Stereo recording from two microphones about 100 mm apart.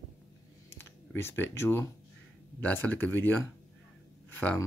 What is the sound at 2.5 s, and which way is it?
Speech, 15° left (ahead or behind).